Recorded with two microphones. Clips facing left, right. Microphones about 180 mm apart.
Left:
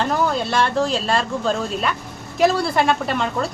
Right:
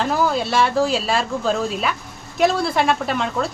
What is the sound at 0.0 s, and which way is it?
Speech, centre (ahead or behind).